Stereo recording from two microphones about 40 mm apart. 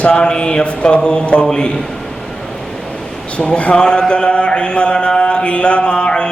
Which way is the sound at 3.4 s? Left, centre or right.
Left.